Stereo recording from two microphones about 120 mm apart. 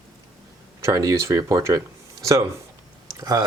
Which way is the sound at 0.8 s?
30° right (ahead or behind).